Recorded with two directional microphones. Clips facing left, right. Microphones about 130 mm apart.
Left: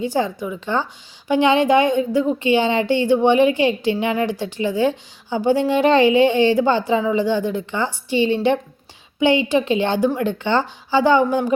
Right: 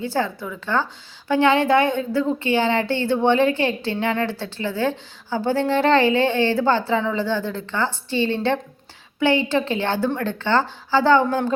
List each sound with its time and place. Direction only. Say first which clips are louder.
0.0 s a woman's voice: left 3 dB; 15° left (ahead or behind)